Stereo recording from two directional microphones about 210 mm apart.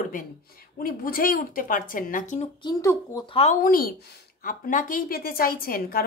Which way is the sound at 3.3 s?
35° left (ahead or behind).